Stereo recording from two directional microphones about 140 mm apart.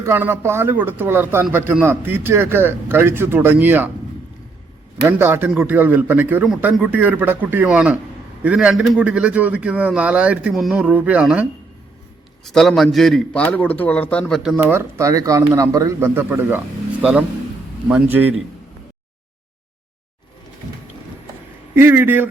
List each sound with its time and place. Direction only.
0.0 s a man's voice: 15° right (ahead or behind)
5.0 s a man's voice: 15° right (ahead or behind)
12.5 s a man's voice: centre (ahead or behind)
14.7 s a man's voice: 20° right (ahead or behind)
21.8 s a man's voice: 15° right (ahead or behind)